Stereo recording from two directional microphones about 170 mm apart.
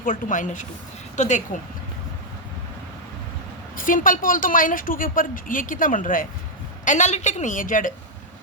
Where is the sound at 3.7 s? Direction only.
55° left (ahead or behind).